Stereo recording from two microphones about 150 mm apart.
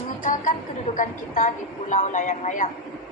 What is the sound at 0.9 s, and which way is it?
A woman's voice, 60° left (ahead or behind).